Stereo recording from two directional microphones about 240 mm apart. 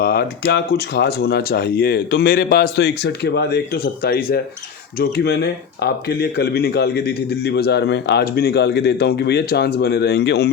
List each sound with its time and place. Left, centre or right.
0.0 s speech: left